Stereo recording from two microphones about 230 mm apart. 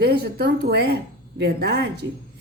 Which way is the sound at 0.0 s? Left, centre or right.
Right.